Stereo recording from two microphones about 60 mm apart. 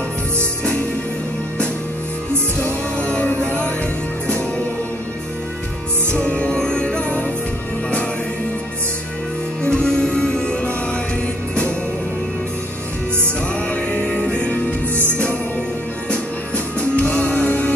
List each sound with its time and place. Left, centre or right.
2.6 s music: left
6.1 s music: centre
9.6 s music: centre
13.7 s music: left
16.1 s music: left